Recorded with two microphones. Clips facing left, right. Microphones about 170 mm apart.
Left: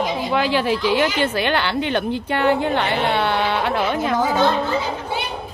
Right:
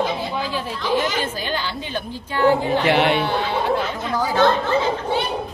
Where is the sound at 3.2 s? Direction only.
70° left (ahead or behind).